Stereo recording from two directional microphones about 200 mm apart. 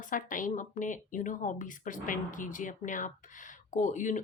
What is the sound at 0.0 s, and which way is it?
Speech, 40° left (ahead or behind).